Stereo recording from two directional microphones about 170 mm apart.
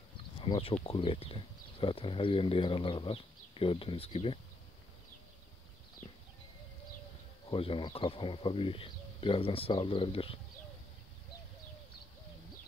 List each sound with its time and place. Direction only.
0.4 s speech: 30° left (ahead or behind)
7.4 s speech: 30° left (ahead or behind)